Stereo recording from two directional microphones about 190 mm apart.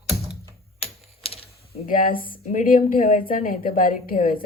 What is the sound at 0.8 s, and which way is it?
Typing, 30° left (ahead or behind).